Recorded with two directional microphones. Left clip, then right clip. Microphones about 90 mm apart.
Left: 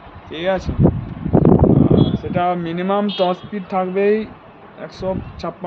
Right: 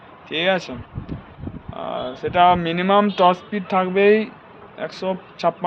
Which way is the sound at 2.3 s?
15° left (ahead or behind).